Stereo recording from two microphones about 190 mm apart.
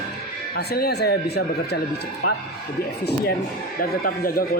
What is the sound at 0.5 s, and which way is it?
Speech, 55° left (ahead or behind).